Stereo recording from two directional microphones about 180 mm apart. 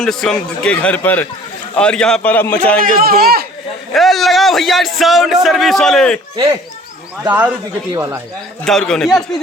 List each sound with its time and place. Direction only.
0.0 s a man's voice: centre (ahead or behind)
2.8 s a man's voice: 55° right (ahead or behind)
3.9 s a man's voice: centre (ahead or behind)
6.3 s speech: 25° right (ahead or behind)
7.3 s speech: 10° right (ahead or behind)
8.6 s a man's voice: 5° left (ahead or behind)